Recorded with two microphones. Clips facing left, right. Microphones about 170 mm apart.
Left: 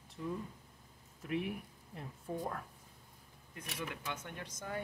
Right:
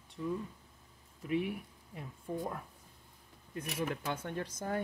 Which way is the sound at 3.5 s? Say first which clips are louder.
Right 7 dB; 40° right (ahead or behind).